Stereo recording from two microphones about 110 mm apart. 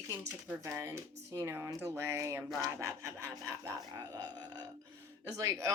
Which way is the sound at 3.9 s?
35° right (ahead or behind).